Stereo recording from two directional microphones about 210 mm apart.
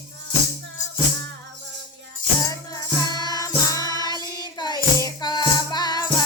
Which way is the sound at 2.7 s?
20° left (ahead or behind).